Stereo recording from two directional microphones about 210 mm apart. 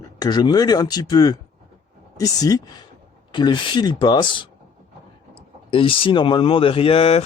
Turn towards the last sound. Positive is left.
turn(degrees=30)  # may be behind; listen again after turning